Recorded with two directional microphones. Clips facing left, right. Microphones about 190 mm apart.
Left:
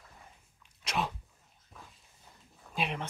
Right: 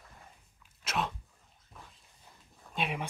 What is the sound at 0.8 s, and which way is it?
Sneeze, centre (ahead or behind).